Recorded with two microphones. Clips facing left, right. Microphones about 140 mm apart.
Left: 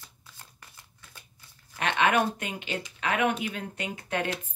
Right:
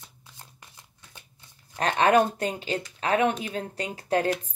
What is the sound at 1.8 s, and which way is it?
Speech, 35° right (ahead or behind).